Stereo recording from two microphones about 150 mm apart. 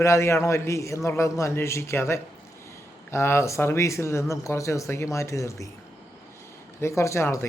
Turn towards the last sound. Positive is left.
turn(degrees=20)  # may be behind; listen again after turning